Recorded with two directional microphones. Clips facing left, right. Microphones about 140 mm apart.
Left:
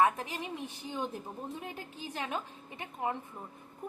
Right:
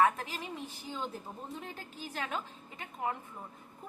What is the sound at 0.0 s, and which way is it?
A woman's voice, 15° left (ahead or behind).